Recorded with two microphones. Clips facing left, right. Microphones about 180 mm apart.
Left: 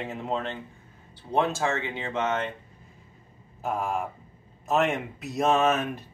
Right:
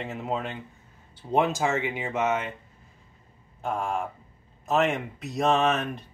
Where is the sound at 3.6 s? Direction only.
Centre (ahead or behind).